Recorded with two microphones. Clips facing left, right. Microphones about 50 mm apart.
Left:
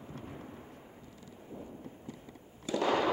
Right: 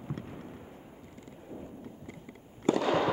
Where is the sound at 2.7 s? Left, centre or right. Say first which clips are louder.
Right 6 dB; right.